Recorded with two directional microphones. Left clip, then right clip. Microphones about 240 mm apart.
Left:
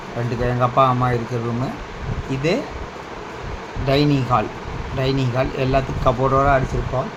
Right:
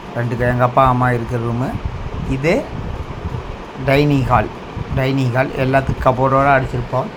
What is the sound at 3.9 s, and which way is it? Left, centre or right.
Speech, centre.